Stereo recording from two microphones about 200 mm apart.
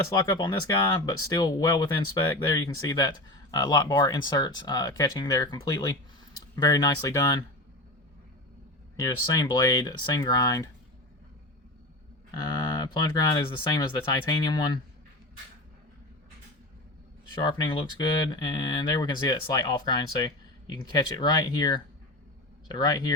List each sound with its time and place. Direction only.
0.1 s speech: 20° left (ahead or behind)
9.0 s speech: 15° left (ahead or behind)
12.3 s speech: 20° left (ahead or behind)
17.4 s speech: 20° left (ahead or behind)